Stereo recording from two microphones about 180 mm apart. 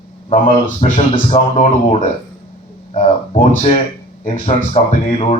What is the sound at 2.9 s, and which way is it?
Speech, 35° left (ahead or behind).